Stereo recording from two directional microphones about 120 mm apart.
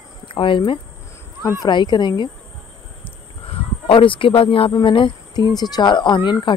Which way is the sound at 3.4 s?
50° left (ahead or behind).